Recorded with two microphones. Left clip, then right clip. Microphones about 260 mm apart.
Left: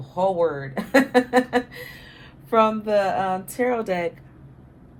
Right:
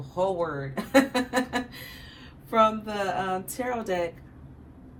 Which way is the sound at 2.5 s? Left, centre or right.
Left.